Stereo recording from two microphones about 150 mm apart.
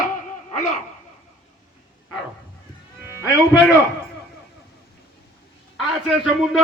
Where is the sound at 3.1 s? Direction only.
20° left (ahead or behind).